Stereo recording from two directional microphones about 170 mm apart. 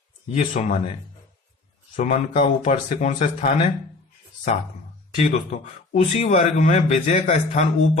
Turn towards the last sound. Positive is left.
turn(degrees=45)  # may be behind; listen again after turning